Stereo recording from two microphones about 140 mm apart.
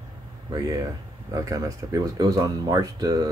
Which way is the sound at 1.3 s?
25° right (ahead or behind).